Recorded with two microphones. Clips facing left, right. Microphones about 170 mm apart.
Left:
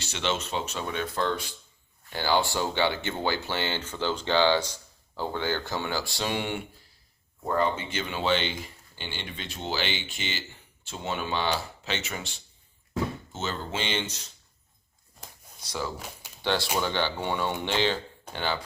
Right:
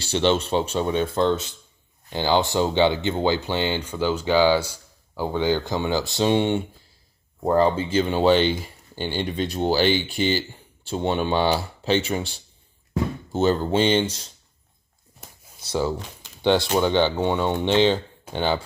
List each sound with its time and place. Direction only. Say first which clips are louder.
0.0 s speech: right 9 dB; 30° right (ahead or behind)
16.4 s speech: right 8 dB; 20° right (ahead or behind)